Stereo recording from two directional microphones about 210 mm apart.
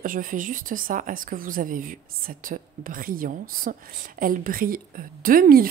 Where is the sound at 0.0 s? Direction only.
40° right (ahead or behind).